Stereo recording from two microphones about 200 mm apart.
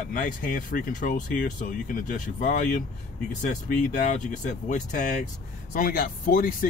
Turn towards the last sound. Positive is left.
turn(degrees=45)  # may be behind; listen again after turning